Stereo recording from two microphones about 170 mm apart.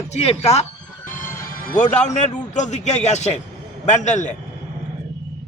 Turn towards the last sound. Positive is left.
turn(degrees=45)  # may be behind; listen again after turning